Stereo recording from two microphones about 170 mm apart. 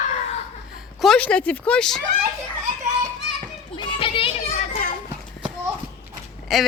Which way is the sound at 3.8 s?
30° left (ahead or behind).